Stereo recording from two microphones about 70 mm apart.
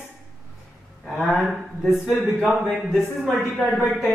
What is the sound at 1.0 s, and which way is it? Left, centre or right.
Speech, centre.